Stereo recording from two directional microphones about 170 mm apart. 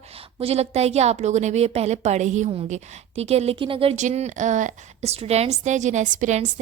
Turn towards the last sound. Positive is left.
turn(degrees=-45)  # may be behind; listen again after turning